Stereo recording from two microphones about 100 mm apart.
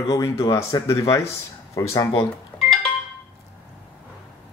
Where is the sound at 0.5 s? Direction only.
30° left (ahead or behind).